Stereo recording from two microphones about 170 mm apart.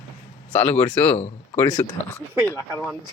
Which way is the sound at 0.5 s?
10° left (ahead or behind).